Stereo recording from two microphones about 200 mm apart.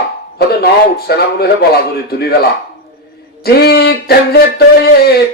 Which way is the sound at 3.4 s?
55° left (ahead or behind).